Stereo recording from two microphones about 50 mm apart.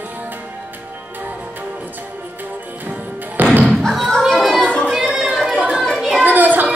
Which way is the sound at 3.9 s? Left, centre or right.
Centre.